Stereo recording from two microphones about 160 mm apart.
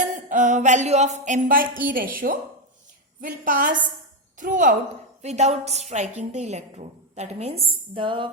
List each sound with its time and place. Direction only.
0.3 s a woman's voice: 55° right (ahead or behind)
5.2 s a woman's voice: 45° right (ahead or behind)